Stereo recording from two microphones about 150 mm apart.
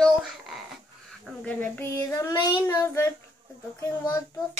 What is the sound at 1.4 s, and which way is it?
Child singing, 15° left (ahead or behind).